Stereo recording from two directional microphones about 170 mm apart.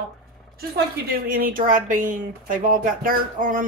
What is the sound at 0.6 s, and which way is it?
Speech, 60° right (ahead or behind).